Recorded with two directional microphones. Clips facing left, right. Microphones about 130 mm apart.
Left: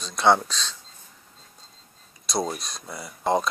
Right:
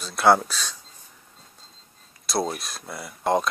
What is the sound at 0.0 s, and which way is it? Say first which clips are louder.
Speech: right 1 dB; 5° right (ahead or behind).